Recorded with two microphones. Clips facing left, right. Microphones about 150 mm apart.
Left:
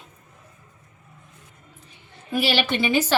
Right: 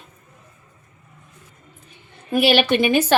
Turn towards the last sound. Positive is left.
turn(degrees=-55)  # may be behind; listen again after turning